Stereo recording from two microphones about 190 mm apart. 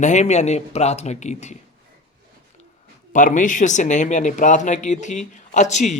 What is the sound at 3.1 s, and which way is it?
Speech, 45° left (ahead or behind).